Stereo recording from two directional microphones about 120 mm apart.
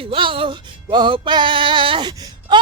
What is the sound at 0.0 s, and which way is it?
Music, 45° right (ahead or behind).